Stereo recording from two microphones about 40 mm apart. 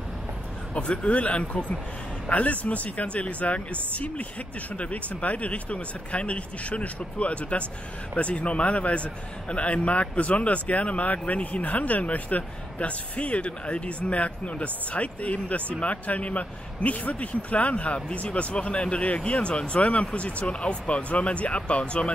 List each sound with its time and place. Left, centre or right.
0.7 s a man's voice: left